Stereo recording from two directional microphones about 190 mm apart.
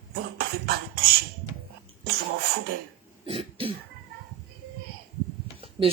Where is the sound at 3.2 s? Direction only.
30° right (ahead or behind).